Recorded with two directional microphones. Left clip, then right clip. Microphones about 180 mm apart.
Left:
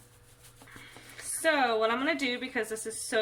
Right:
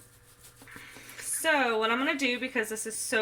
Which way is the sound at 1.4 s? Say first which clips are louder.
Even; 35° right (ahead or behind).